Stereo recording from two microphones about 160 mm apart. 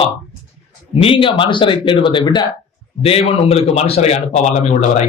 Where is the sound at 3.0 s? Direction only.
40° left (ahead or behind).